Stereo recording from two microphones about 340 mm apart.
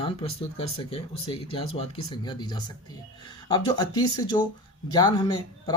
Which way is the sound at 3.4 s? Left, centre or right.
Centre.